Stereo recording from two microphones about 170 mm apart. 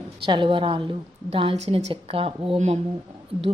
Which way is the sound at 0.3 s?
30° right (ahead or behind).